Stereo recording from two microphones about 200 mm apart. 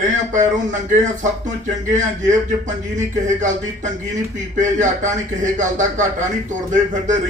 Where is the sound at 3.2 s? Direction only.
40° right (ahead or behind).